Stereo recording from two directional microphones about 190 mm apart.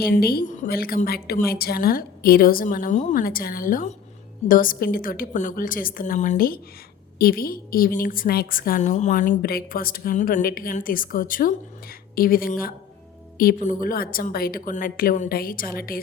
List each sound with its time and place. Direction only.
0.2 s a woman's voice: 55° left (ahead or behind)